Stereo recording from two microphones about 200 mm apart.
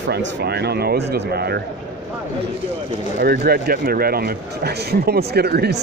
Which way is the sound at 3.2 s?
50° right (ahead or behind).